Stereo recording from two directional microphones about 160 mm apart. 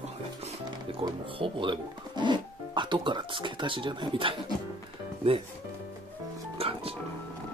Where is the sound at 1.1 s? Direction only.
35° right (ahead or behind).